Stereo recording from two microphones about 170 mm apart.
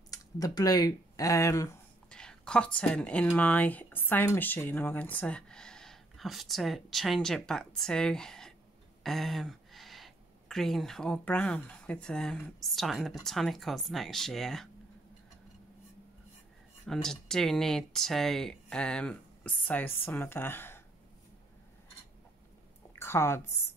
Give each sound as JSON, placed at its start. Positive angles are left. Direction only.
{"t": 0.1, "sound": "speech", "side_deg": 20}
{"t": 2.0, "sound": "a woman's voice", "side_deg": 5}
{"t": 16.8, "sound": "a woman's voice", "side_deg": 0}
{"t": 22.9, "sound": "a sound", "side_deg": 15}